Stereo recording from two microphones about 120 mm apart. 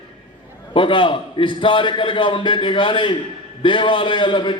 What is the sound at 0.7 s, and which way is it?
A man's voice, 45° left (ahead or behind).